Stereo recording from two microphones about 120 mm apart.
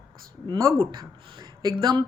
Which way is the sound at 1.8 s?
40° right (ahead or behind).